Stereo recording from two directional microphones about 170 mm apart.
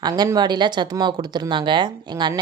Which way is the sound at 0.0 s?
20° right (ahead or behind).